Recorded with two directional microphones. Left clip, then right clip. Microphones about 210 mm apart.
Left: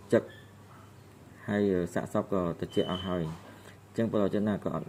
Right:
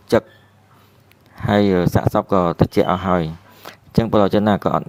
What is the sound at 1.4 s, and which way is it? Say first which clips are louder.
Speech: right 13 dB; 50° right (ahead or behind).